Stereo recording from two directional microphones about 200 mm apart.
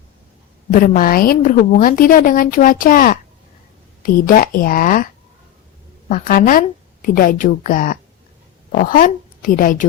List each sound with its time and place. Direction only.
0.7 s a woman's voice: 45° left (ahead or behind)
6.1 s a woman's voice: 40° left (ahead or behind)